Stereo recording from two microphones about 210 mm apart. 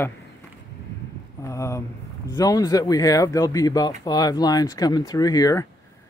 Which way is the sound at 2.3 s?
15° left (ahead or behind).